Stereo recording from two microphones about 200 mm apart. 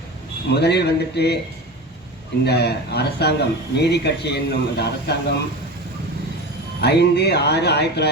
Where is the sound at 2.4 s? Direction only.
55° left (ahead or behind).